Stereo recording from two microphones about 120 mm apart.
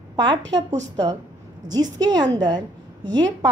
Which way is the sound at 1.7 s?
35° right (ahead or behind).